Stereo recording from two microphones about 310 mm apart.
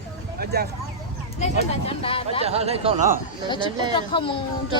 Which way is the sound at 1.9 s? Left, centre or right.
Centre.